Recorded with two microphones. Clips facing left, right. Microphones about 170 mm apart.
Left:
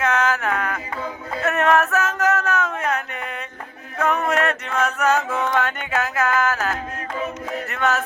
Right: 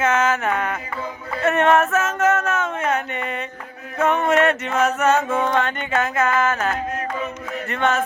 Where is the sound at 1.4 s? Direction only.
Centre (ahead or behind).